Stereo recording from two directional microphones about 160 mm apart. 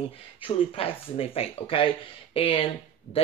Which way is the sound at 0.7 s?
35° left (ahead or behind).